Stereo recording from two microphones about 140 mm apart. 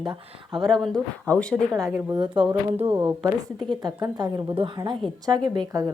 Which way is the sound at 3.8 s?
30° right (ahead or behind).